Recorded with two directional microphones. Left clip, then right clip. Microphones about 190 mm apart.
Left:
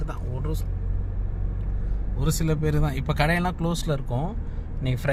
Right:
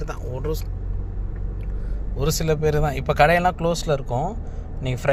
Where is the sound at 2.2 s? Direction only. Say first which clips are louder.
Right 6 dB; centre (ahead or behind).